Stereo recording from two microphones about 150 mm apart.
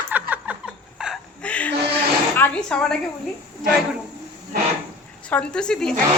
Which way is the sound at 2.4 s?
5° left (ahead or behind).